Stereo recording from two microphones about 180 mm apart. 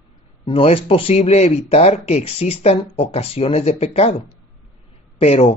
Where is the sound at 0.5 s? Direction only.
30° left (ahead or behind).